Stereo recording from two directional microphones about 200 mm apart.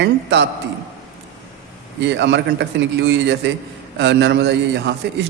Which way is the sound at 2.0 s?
60° right (ahead or behind).